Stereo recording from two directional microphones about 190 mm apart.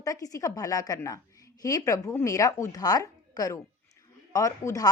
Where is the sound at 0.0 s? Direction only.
20° left (ahead or behind).